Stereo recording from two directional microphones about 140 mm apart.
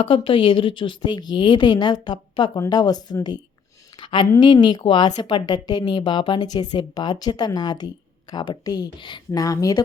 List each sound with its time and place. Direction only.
0.0 s a woman's voice: 40° left (ahead or behind)
4.0 s a sound: 35° left (ahead or behind)
4.3 s a woman's voice: 30° left (ahead or behind)